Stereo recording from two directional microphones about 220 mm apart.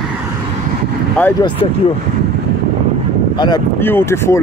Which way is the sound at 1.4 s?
20° left (ahead or behind).